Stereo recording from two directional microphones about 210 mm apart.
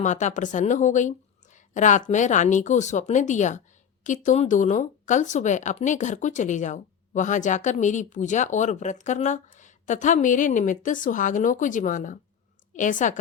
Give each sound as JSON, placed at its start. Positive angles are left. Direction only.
{"t": 0.0, "sound": "speech", "side_deg": 35}